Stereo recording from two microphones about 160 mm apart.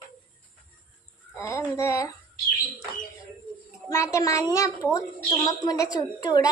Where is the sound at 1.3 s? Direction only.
15° left (ahead or behind).